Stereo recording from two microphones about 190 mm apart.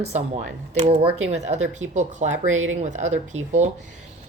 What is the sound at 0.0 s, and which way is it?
Speech, 35° right (ahead or behind).